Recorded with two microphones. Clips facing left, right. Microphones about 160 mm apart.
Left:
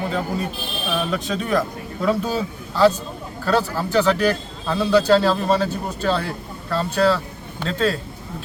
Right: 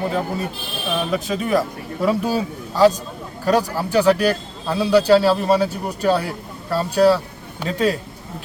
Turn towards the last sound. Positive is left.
turn(degrees=-15)  # may be behind; listen again after turning